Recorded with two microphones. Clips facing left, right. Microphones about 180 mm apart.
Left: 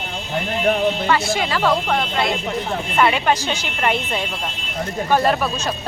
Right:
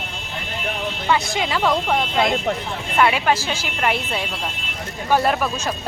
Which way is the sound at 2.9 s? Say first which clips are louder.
Even; centre (ahead or behind).